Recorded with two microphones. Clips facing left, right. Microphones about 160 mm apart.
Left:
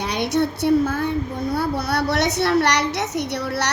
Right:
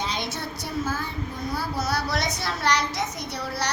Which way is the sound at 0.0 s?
65° left (ahead or behind).